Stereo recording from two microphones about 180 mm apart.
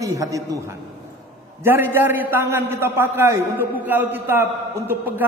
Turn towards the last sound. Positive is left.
turn(degrees=-10)  # may be behind; listen again after turning